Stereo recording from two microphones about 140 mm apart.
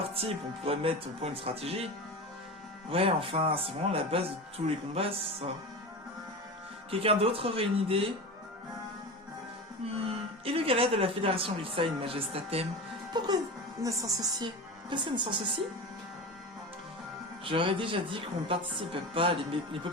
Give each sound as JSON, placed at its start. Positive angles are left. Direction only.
{"t": 0.1, "sound": "speech", "side_deg": -45}
{"t": 2.9, "sound": "speech", "side_deg": -40}
{"t": 6.9, "sound": "speech", "side_deg": -45}
{"t": 9.9, "sound": "speech", "side_deg": -45}
{"t": 13.2, "sound": "a woman's voice", "side_deg": -30}
{"t": 17.4, "sound": "a woman's voice", "side_deg": -40}